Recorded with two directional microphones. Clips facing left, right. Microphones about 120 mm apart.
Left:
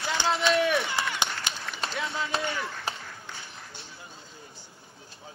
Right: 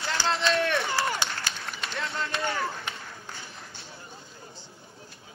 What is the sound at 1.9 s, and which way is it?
Run, centre (ahead or behind).